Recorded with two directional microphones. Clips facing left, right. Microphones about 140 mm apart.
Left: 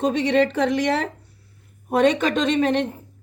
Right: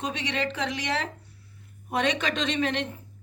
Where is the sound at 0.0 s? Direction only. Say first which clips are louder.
Left 11 dB; 45° left (ahead or behind).